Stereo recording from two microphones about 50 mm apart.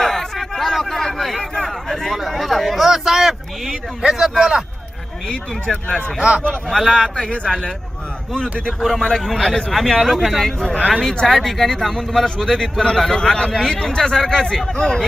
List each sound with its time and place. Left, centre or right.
0.0 s a sound: centre
4.1 s speech: centre
5.9 s speech: centre
6.1 s speech: centre
6.7 s speech: centre
8.8 s speech: centre
11.0 s speech: centre
11.3 s speech: centre